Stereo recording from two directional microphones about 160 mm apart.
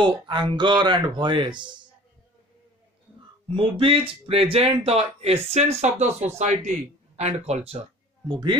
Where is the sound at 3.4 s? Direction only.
35° right (ahead or behind).